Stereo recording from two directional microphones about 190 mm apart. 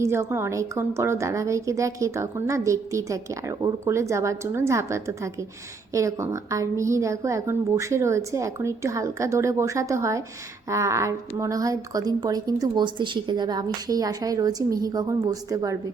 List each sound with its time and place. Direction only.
0.0 s a woman's voice: 15° right (ahead or behind)